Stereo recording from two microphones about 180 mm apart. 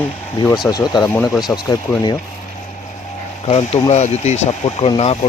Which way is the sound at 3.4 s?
35° left (ahead or behind).